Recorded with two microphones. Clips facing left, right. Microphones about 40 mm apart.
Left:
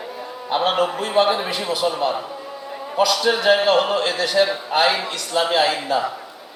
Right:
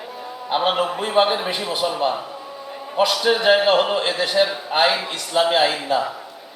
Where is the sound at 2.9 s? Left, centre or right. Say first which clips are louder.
Even; right.